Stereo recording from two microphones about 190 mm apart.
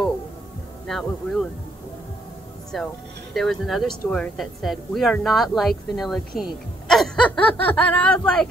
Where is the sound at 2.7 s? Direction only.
Centre (ahead or behind).